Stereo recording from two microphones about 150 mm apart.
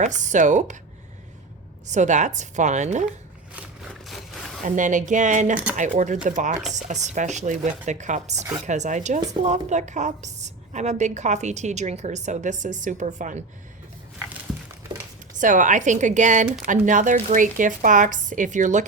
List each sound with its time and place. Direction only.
0.0 s a woman's voice: 55° right (ahead or behind)
1.9 s a woman's voice: 55° right (ahead or behind)
3.5 s a sound: 5° right (ahead or behind)
4.6 s a woman's voice: 60° right (ahead or behind)
15.4 s speech: 60° right (ahead or behind)